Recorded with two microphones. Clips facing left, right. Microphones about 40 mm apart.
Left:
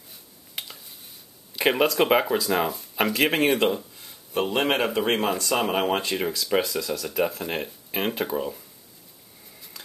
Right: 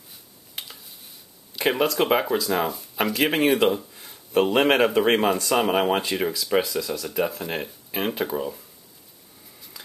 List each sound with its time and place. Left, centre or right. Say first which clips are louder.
0.1 s a sound: left 1 dB; centre
1.5 s speech: left 1 dB; centre
4.3 s speech: right 5 dB; right; by 8.6 s centre